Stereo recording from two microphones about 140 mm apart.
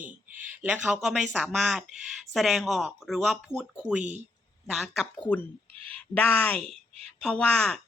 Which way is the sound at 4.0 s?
55° right (ahead or behind).